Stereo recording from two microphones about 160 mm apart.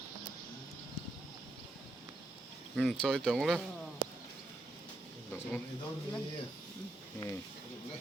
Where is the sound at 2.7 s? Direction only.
5° left (ahead or behind).